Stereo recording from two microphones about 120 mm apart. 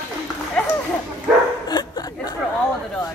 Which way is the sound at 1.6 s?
35° left (ahead or behind).